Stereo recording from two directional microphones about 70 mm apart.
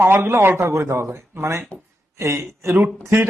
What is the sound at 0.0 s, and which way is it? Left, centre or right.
A man's voice, right.